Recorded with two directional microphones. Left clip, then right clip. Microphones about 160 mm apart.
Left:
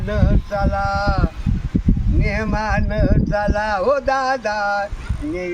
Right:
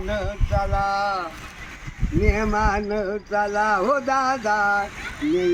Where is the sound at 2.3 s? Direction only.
40° left (ahead or behind).